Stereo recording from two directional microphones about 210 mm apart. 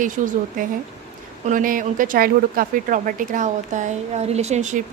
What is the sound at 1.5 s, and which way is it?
Speech, 40° right (ahead or behind).